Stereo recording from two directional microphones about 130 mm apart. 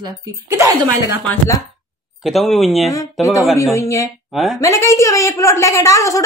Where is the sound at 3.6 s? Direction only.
25° left (ahead or behind).